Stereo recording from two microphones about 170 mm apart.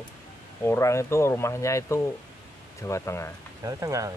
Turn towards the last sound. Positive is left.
turn(degrees=-20)  # may be behind; listen again after turning